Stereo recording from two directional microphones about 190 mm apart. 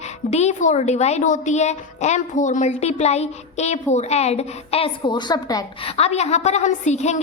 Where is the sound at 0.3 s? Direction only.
35° left (ahead or behind); by 5.9 s 20° left (ahead or behind).